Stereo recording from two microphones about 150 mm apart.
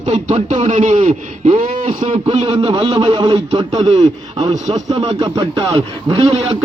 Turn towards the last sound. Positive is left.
turn(degrees=-40)  # may be behind; listen again after turning